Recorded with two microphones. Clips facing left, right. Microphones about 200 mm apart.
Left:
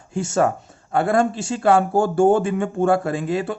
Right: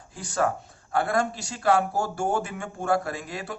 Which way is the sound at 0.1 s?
25° left (ahead or behind).